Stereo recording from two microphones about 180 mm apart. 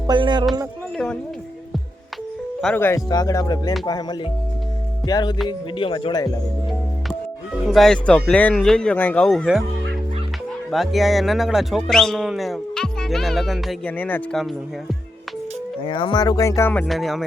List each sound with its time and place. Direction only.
0.1 s speech: 25° right (ahead or behind)
0.9 s speech: 5° left (ahead or behind)
2.6 s speech: 10° left (ahead or behind); by 6.3 s 25° left (ahead or behind)
7.7 s speech: centre (ahead or behind)
10.7 s speech: centre (ahead or behind)
15.8 s speech: 30° left (ahead or behind)
16.8 s speech: centre (ahead or behind)